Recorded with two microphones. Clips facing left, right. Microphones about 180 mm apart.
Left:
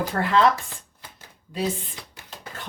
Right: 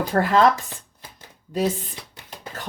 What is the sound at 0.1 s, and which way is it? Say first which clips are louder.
Speech: right 4 dB; 45° right (ahead or behind).